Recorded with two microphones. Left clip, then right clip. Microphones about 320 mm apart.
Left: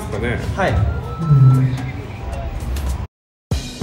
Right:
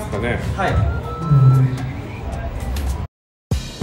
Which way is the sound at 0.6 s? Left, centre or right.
Left.